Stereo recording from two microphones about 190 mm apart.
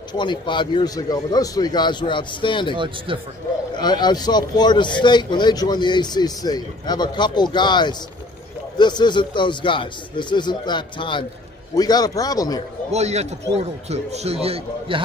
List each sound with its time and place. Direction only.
0.1 s a man's voice: 25° left (ahead or behind)
2.7 s speech: 25° right (ahead or behind)
3.8 s a man's voice: 20° left (ahead or behind)
12.9 s a man's voice: 35° right (ahead or behind)